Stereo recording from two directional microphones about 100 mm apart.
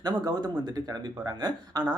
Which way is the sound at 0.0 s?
45° right (ahead or behind).